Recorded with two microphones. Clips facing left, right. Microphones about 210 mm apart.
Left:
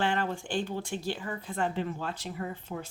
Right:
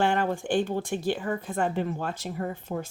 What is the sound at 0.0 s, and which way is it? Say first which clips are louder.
Speech: right 5 dB; 50° right (ahead or behind).